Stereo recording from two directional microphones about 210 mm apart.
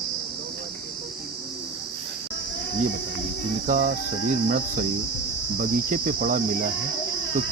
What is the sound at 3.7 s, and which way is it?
Cricket, 40° right (ahead or behind).